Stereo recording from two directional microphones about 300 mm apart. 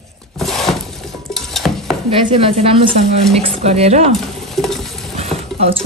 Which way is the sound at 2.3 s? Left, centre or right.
Centre.